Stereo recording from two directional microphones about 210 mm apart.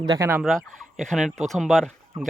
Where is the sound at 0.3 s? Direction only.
5° right (ahead or behind).